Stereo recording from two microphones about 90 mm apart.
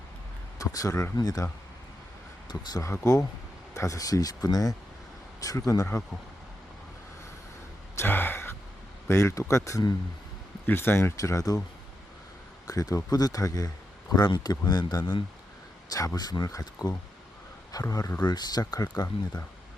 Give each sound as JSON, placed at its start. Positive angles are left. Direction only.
{"t": 0.6, "sound": "speech", "side_deg": 40}
{"t": 2.5, "sound": "speech", "side_deg": 50}
{"t": 2.8, "sound": "speech", "side_deg": 35}
{"t": 7.9, "sound": "speech", "side_deg": 25}
{"t": 12.6, "sound": "speech", "side_deg": 40}
{"t": 14.1, "sound": "speech", "side_deg": 50}
{"t": 15.9, "sound": "speech", "side_deg": 40}